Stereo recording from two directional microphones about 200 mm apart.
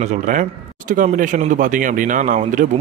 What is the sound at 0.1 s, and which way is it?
Speech, 40° right (ahead or behind).